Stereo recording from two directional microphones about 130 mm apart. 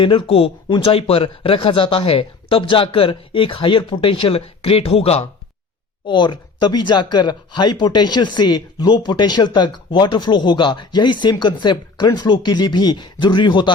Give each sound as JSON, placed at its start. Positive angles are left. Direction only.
{"t": 0.0, "sound": "speech", "side_deg": 45}
{"t": 6.1, "sound": "speech", "side_deg": 35}